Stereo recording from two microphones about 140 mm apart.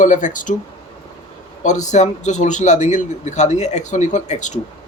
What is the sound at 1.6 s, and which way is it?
A man's voice, 60° left (ahead or behind).